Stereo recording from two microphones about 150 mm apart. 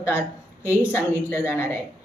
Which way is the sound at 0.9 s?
15° left (ahead or behind).